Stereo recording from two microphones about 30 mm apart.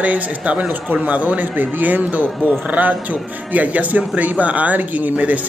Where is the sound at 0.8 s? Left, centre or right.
Right.